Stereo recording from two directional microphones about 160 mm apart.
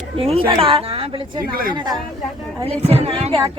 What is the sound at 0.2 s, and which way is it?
A man's voice, 35° right (ahead or behind).